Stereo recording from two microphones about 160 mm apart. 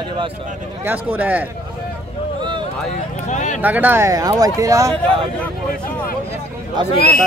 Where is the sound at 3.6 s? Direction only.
10° right (ahead or behind).